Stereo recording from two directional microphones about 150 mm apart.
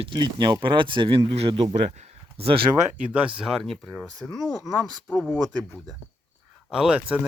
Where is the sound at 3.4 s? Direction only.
Centre (ahead or behind).